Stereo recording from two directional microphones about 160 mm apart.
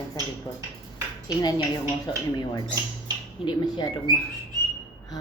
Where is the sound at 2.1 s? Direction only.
30° left (ahead or behind).